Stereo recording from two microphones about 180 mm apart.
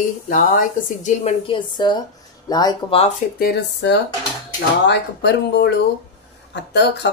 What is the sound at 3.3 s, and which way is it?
Speech, 60° left (ahead or behind).